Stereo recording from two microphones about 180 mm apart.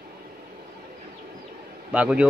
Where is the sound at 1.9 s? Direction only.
5° right (ahead or behind).